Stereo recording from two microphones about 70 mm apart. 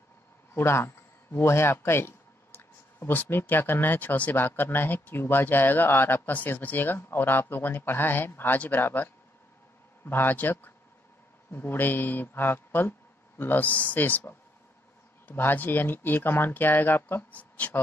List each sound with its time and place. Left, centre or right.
0.6 s speech: left